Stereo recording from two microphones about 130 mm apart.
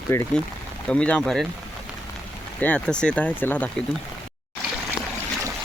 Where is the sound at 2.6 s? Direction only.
10° left (ahead or behind).